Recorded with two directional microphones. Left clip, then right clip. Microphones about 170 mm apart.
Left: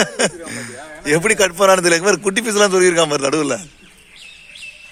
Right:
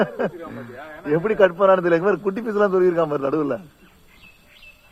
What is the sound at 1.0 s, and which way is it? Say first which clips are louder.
Speech: left 2 dB; 25° left (ahead or behind).